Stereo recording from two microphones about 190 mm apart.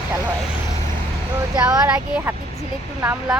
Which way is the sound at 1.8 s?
10° right (ahead or behind).